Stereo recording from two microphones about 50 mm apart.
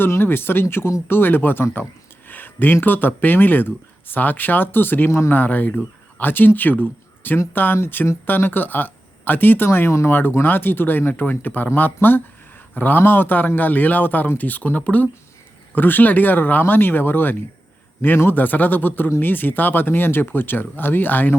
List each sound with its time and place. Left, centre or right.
0.0 s speech: left
2.2 s a sound: left
2.8 s speech: left
9.6 s speech: left
10.1 s speech: left